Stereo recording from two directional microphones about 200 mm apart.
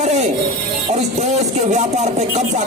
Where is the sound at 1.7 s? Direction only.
35° right (ahead or behind).